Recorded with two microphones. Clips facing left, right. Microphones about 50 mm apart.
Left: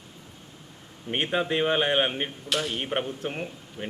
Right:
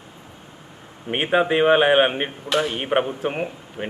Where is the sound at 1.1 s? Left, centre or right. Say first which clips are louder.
Right 7 dB; centre.